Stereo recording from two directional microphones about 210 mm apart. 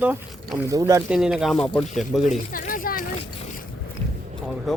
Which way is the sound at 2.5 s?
40° left (ahead or behind).